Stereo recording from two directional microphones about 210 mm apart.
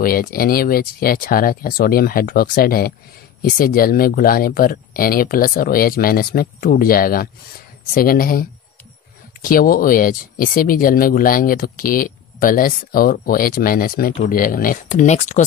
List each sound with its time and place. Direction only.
0.0 s speech: 45° left (ahead or behind)